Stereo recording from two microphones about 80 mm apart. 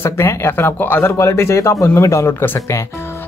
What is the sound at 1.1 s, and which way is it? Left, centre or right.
Speech, left.